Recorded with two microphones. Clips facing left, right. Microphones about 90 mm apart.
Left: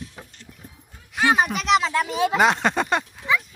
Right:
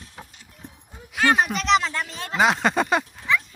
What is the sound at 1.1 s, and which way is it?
Speech, 5° left (ahead or behind).